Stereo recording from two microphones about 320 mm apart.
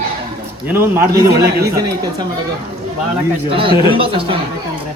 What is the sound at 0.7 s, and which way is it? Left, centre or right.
A man's voice, centre.